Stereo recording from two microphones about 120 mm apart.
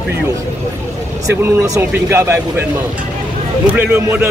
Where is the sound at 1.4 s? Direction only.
25° right (ahead or behind).